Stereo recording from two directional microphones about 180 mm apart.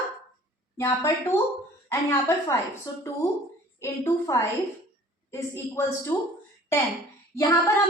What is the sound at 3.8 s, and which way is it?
A woman's voice, 15° left (ahead or behind).